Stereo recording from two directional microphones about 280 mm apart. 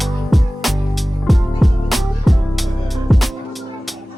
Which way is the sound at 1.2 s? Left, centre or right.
Centre.